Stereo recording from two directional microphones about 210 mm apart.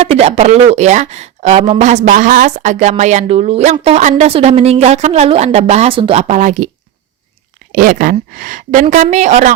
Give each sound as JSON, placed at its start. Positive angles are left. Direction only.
{"t": 0.0, "sound": "a woman's voice", "side_deg": -30}
{"t": 7.7, "sound": "a woman's voice", "side_deg": -40}